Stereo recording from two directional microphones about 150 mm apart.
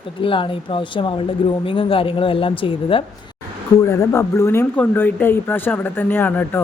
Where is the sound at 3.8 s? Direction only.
20° left (ahead or behind).